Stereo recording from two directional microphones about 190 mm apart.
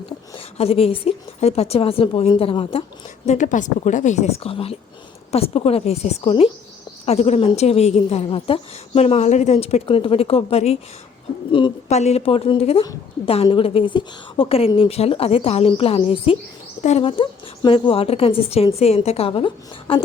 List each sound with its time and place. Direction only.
0.3 s a woman's voice: 30° left (ahead or behind)
3.2 s a woman's voice: 40° left (ahead or behind)
12.8 s a woman's voice: 20° left (ahead or behind)